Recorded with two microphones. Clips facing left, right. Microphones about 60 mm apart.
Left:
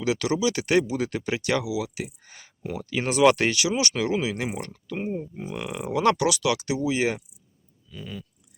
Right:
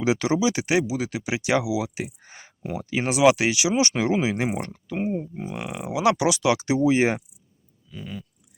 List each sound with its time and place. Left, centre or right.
0.0 s speech: right
6.1 s speech: right
7.9 s speech: centre